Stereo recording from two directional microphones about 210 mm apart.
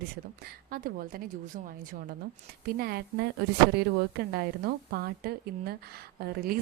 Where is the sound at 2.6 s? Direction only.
50° right (ahead or behind).